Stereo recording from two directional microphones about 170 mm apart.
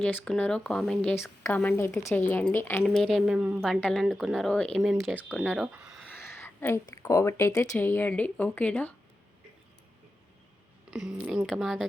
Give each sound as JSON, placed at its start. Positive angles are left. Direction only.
{"t": 0.0, "sound": "speech", "side_deg": 10}
{"t": 1.1, "sound": "speech", "side_deg": 15}
{"t": 2.8, "sound": "speech", "side_deg": 0}
{"t": 6.1, "sound": "speech", "side_deg": 15}
{"t": 10.9, "sound": "speech", "side_deg": -5}